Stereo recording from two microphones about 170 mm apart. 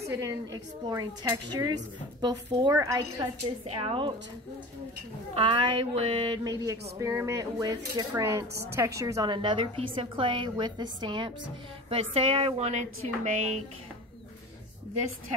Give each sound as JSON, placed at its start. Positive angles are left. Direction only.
{"t": 0.1, "sound": "a woman's voice", "side_deg": -20}
{"t": 3.6, "sound": "a woman's voice", "side_deg": -35}
{"t": 5.3, "sound": "a woman's voice", "side_deg": -30}